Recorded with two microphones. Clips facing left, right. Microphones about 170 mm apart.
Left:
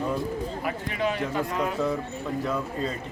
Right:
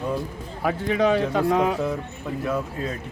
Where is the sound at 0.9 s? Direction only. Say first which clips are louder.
Right 6 dB; 90° right.